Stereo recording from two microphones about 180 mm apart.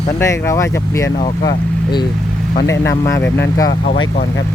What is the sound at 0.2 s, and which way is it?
Speech, 15° left (ahead or behind).